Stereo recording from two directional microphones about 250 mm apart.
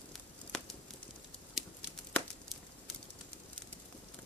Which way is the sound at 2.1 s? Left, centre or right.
Centre.